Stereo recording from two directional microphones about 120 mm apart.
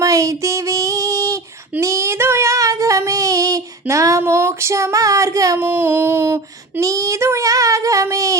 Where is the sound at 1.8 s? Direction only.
25° right (ahead or behind).